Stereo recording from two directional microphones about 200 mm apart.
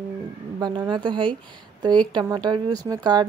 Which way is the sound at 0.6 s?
20° right (ahead or behind).